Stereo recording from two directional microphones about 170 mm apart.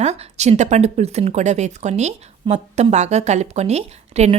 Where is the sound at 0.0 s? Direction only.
40° right (ahead or behind).